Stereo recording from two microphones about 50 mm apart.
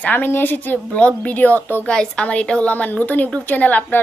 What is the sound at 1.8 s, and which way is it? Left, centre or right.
Speech, centre.